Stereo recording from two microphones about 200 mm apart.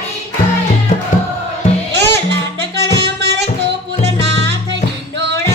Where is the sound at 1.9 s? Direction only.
60° right (ahead or behind).